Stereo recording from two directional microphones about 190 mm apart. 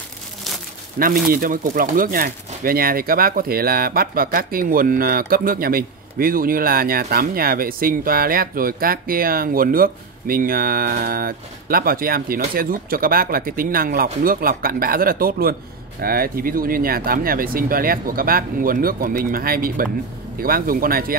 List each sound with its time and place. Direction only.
0.9 s speech: 50° right (ahead or behind)